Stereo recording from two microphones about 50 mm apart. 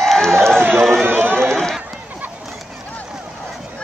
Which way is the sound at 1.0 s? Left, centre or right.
Right.